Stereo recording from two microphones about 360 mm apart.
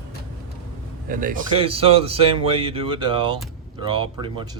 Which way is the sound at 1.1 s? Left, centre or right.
Right.